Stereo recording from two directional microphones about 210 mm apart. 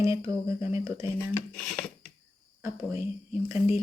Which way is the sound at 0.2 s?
15° right (ahead or behind).